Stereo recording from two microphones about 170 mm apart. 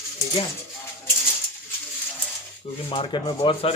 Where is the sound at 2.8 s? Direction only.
30° left (ahead or behind).